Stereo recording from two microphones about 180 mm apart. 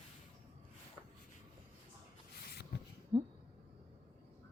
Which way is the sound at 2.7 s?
70° left (ahead or behind).